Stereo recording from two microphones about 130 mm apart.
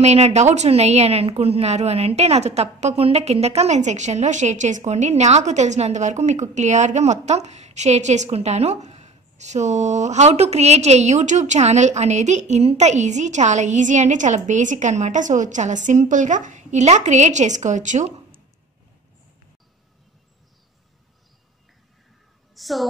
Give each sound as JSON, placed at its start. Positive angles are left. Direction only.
{"t": 0.0, "sound": "a woman's voice", "side_deg": -60}
{"t": 22.6, "sound": "speech", "side_deg": 0}